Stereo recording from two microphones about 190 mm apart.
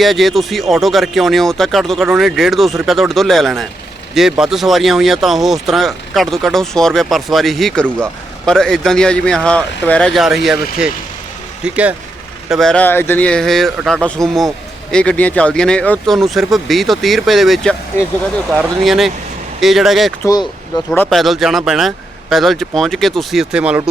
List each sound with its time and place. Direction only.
0.0 s speech: centre (ahead or behind)
20.2 s speech: 20° left (ahead or behind)
20.9 s speech: 5° left (ahead or behind)